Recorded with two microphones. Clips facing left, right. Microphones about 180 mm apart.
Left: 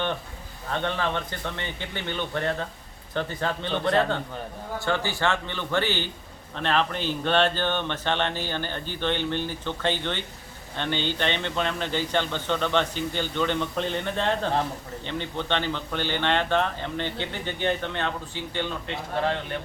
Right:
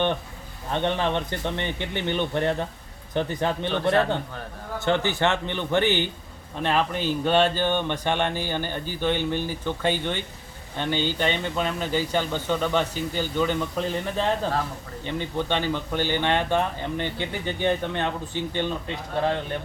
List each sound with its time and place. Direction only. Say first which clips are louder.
0.7 s a man's voice: right 3 dB; 20° right (ahead or behind)